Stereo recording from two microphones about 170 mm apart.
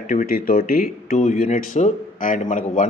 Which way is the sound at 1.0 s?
45° left (ahead or behind).